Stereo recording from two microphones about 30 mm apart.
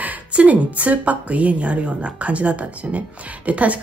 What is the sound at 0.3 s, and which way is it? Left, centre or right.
A woman's voice, right.